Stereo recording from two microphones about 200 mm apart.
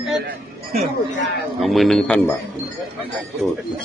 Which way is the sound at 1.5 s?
Centre (ahead or behind).